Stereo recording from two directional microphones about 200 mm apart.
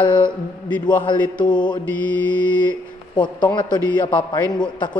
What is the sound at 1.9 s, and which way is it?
Mantra, 10° left (ahead or behind).